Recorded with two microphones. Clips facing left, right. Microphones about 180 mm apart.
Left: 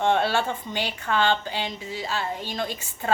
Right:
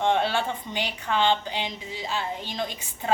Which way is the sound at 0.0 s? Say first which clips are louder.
Left 1 dB; 15° right (ahead or behind).